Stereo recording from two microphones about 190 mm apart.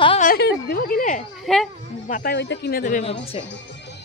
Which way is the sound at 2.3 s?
65° left (ahead or behind).